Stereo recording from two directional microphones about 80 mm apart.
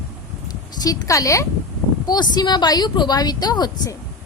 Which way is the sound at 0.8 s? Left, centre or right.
Left.